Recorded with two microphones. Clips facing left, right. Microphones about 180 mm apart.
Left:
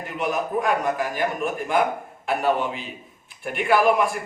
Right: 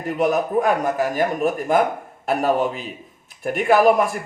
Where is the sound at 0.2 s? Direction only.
40° right (ahead or behind).